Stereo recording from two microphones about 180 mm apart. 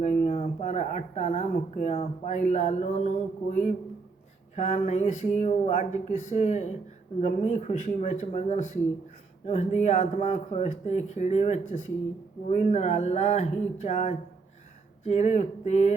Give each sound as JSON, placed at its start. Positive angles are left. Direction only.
{"t": 0.0, "sound": "speech", "side_deg": 40}
{"t": 4.5, "sound": "speech", "side_deg": 40}